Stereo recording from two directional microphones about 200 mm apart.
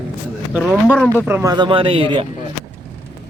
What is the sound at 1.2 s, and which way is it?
Speech, 15° right (ahead or behind).